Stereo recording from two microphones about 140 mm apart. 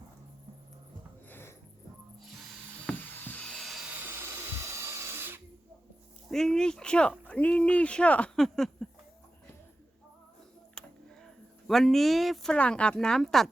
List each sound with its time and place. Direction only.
1.3 s sniff: 15° left (ahead or behind)
2.8 s a sound: 10° left (ahead or behind)
3.9 s a sound: 15° right (ahead or behind)
6.3 s speech: 5° left (ahead or behind)
10.8 s tick: 5° left (ahead or behind)
11.7 s speech: centre (ahead or behind)